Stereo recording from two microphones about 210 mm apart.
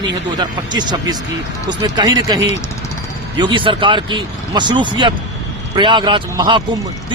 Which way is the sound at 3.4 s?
20° right (ahead or behind).